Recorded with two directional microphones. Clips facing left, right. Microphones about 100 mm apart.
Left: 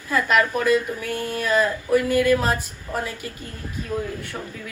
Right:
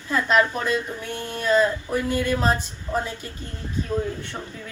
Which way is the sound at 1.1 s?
45° left (ahead or behind).